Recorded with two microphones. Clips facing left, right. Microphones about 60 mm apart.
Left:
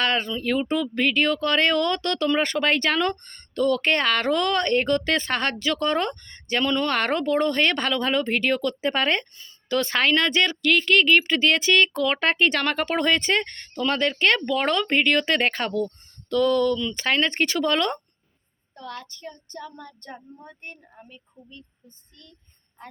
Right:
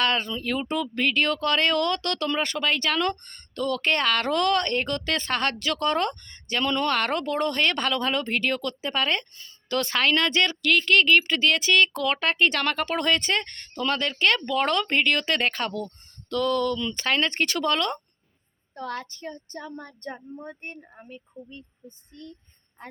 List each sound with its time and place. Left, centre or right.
0.0 s a sound: centre
0.3 s speech: centre
2.4 s speech: left
2.9 s speech: centre
3.3 s speech: left
18.8 s speech: right
19.2 s speech: right